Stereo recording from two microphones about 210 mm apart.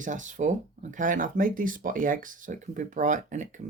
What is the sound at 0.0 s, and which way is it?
Speech, 35° right (ahead or behind).